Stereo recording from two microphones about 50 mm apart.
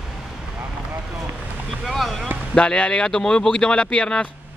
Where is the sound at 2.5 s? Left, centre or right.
Left.